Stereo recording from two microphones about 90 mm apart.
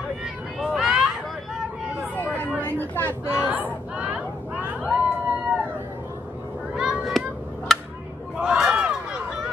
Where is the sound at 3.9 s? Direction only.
15° right (ahead or behind).